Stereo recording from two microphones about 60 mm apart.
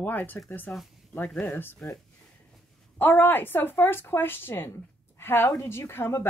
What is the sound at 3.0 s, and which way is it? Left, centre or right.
A woman's voice, left.